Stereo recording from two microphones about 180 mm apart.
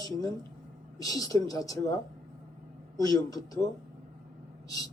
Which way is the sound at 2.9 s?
20° left (ahead or behind).